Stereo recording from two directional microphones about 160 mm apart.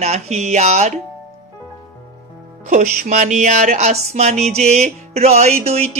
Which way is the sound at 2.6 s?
50° right (ahead or behind).